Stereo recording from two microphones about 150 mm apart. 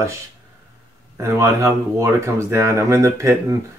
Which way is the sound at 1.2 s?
20° right (ahead or behind).